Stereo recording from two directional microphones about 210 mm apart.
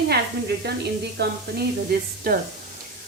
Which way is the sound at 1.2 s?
50° right (ahead or behind).